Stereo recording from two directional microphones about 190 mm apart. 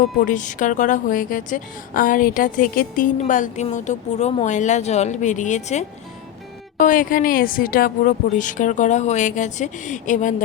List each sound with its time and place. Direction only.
0.2 s a woman's voice: 40° left (ahead or behind)